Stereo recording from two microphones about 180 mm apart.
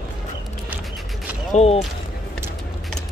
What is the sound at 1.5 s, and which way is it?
Speech, 35° left (ahead or behind).